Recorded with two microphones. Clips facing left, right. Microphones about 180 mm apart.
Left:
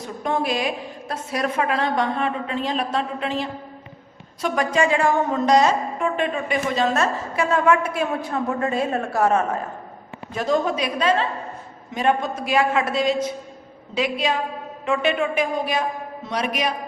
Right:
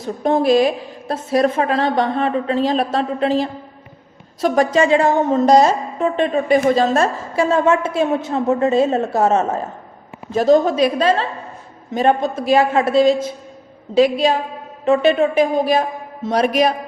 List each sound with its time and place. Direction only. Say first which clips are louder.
0.2 s a woman's voice: right 9 dB; 35° right (ahead or behind)
5.3 s a woman's voice: right 6 dB; 40° right (ahead or behind)